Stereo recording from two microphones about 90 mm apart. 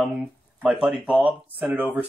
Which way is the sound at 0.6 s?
10° right (ahead or behind).